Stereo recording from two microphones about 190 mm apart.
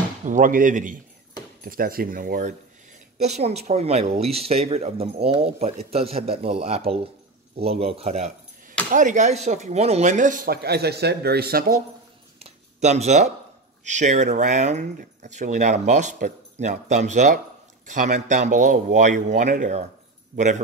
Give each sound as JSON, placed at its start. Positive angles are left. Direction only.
{"t": 0.2, "sound": "speech", "side_deg": -45}
{"t": 3.2, "sound": "speech", "side_deg": -35}
{"t": 12.4, "sound": "a sound", "side_deg": -35}
{"t": 13.8, "sound": "speech", "side_deg": -40}